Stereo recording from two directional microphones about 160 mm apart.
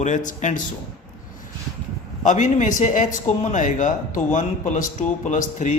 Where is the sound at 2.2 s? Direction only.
50° left (ahead or behind).